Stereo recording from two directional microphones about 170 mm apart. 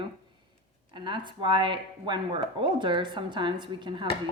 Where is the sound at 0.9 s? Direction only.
30° right (ahead or behind).